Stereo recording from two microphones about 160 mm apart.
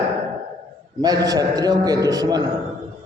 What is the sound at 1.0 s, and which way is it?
A man's voice, 25° right (ahead or behind).